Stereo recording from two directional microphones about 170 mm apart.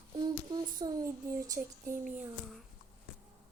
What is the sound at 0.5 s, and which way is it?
Speech, 25° right (ahead or behind).